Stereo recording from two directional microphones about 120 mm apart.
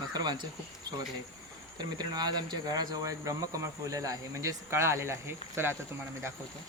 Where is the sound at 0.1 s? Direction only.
35° right (ahead or behind).